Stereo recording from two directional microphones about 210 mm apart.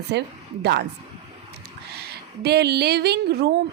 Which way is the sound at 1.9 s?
50° right (ahead or behind).